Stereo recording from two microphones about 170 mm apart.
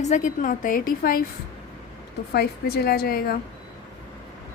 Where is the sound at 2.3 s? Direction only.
65° left (ahead or behind).